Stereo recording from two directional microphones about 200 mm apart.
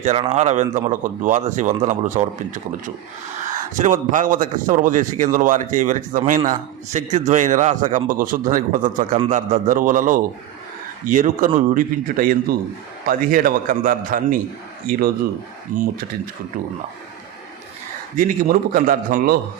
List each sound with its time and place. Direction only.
0.0 s speech: 35° right (ahead or behind)
3.4 s speech: 40° right (ahead or behind)
15.7 s speech: 40° right (ahead or behind)
18.2 s speech: 45° right (ahead or behind)